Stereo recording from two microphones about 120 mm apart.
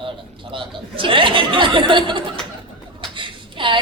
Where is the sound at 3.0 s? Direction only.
45° right (ahead or behind).